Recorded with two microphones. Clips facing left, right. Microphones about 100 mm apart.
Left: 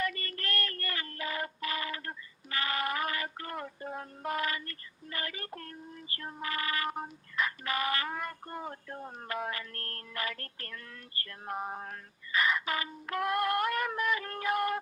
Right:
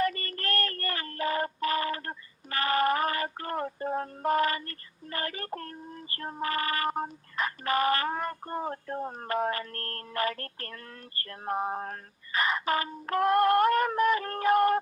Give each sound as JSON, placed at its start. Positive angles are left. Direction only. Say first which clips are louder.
{"t": 0.0, "sound": "synthetic singing", "louder": "right 6 dB", "side_deg": -45}